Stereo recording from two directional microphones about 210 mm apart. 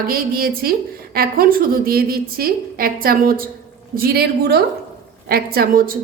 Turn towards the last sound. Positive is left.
turn(degrees=-45)  # may be behind; listen again after turning